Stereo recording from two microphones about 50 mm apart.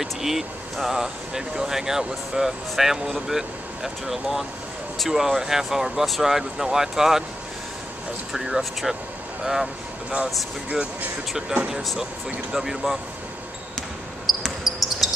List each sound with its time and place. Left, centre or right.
0.0 s speech: centre
8.3 s speech: centre
10.1 s speech: centre
14.3 s basketball bounce: centre
15.0 s a sound: centre